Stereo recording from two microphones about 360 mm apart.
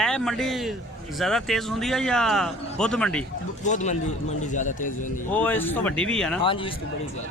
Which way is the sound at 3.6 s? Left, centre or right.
Centre.